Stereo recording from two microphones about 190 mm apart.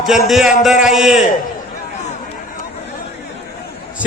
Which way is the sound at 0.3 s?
Centre (ahead or behind).